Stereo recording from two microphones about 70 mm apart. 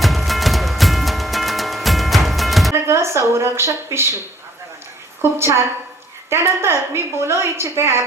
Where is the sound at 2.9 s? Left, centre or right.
Right.